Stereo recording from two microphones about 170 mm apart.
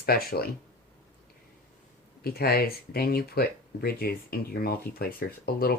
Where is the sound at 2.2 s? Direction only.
65° left (ahead or behind).